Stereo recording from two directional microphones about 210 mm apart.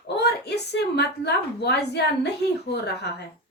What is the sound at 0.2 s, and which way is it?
A woman's voice, 50° left (ahead or behind).